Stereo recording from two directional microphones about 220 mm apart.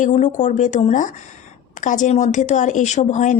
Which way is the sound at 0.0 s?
35° left (ahead or behind).